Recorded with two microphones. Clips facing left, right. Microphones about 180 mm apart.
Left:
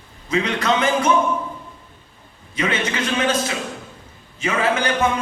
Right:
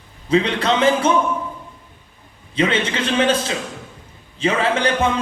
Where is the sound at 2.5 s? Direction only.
30° right (ahead or behind).